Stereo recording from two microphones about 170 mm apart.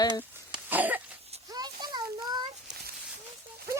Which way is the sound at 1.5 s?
25° right (ahead or behind).